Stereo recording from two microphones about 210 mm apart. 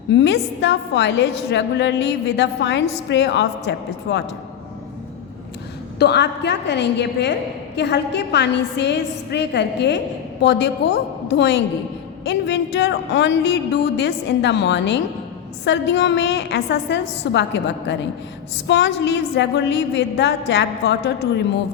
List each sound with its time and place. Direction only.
0.1 s a woman's voice: 55° left (ahead or behind)
6.0 s a woman's voice: 55° left (ahead or behind)